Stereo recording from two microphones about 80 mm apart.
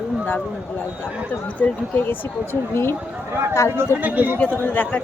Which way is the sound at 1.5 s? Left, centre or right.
Centre.